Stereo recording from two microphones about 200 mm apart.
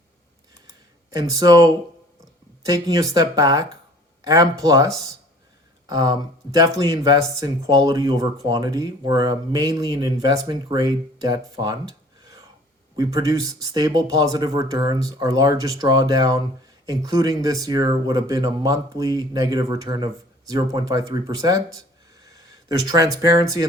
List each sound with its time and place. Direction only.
1.1 s speech: 20° right (ahead or behind)